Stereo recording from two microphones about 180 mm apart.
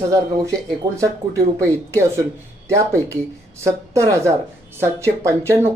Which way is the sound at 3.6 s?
15° right (ahead or behind).